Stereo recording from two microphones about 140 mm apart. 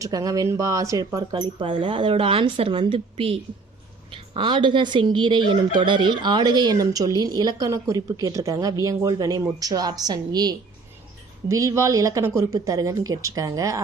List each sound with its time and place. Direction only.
0.0 s fowl: 25° right (ahead or behind)
1.3 s speech: 35° right (ahead or behind)
4.1 s fowl: 35° right (ahead or behind)